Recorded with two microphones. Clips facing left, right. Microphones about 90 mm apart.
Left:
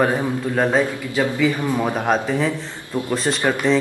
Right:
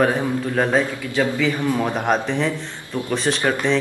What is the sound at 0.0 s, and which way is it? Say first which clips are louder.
Speech: even; centre (ahead or behind).